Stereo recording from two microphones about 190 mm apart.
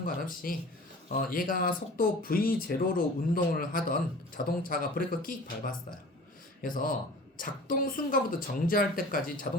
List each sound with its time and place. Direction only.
0.0 s speech: 50° left (ahead or behind)